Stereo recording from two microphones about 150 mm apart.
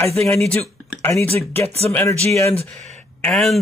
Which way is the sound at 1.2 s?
40° right (ahead or behind).